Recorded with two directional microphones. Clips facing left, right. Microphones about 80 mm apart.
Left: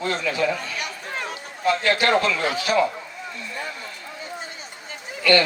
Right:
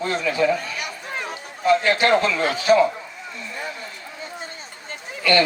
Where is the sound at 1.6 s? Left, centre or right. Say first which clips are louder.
Right 3 dB; right.